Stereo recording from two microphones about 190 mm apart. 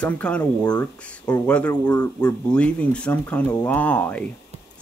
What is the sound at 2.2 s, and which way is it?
Speech, 5° left (ahead or behind).